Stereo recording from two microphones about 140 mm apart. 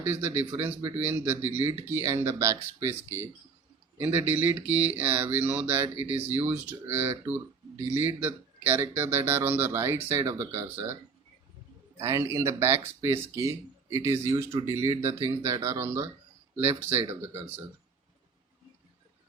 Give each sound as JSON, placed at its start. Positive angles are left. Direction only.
{"t": 0.0, "sound": "speech", "side_deg": -15}
{"t": 11.9, "sound": "speech", "side_deg": -20}